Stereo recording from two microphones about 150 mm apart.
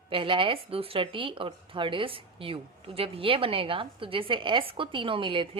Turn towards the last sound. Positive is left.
turn(degrees=-35)  # may be behind; listen again after turning